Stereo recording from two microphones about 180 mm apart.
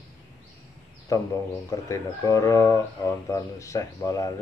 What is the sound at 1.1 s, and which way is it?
A man's voice, 20° left (ahead or behind).